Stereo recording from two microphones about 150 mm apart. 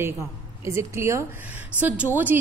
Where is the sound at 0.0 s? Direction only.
20° right (ahead or behind).